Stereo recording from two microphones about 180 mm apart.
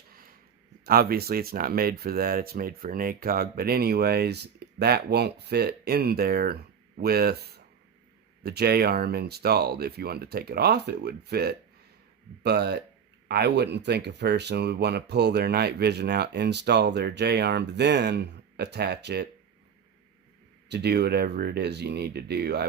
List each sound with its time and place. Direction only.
0.9 s speech: 55° right (ahead or behind)
20.7 s speech: 65° right (ahead or behind)